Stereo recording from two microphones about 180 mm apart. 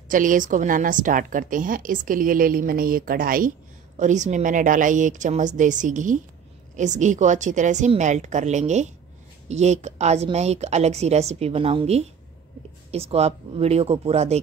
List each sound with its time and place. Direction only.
0.1 s a woman's voice: 45° right (ahead or behind)